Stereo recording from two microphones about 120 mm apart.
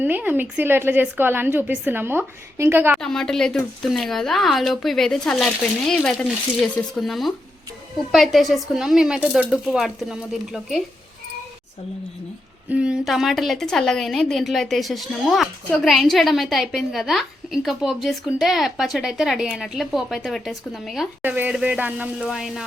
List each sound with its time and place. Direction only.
0.0 s a woman's voice: 15° right (ahead or behind)
3.0 s a woman's voice: 5° left (ahead or behind)
12.7 s a woman's voice: 10° right (ahead or behind)
21.2 s a woman's voice: 15° right (ahead or behind)